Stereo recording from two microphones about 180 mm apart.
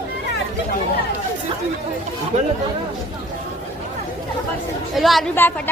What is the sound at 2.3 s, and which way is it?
Speech, 35° right (ahead or behind).